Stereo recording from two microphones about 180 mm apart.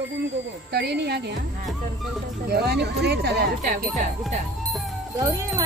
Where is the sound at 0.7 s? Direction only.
65° right (ahead or behind).